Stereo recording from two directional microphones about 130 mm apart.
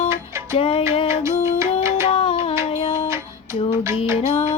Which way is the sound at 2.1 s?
40° left (ahead or behind).